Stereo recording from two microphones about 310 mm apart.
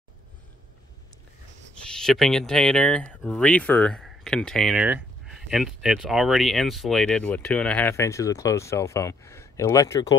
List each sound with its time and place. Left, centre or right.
1.9 s speech: centre